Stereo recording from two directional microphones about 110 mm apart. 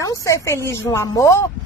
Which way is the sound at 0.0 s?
30° left (ahead or behind).